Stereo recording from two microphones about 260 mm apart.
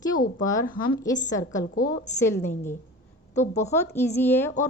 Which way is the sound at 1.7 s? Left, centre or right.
Left.